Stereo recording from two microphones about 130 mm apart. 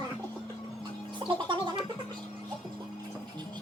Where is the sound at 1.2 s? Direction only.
40° right (ahead or behind).